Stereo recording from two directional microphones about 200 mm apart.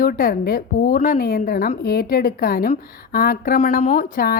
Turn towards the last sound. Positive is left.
turn(degrees=45)  # may be behind; listen again after turning